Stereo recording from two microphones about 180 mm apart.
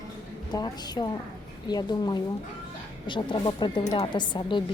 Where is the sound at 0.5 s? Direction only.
25° left (ahead or behind).